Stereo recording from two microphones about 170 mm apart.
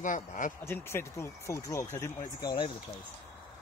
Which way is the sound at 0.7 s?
15° left (ahead or behind).